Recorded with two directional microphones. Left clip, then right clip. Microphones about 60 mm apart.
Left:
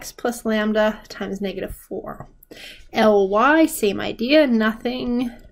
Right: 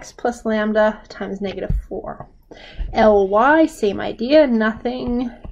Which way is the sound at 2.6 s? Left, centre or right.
Left.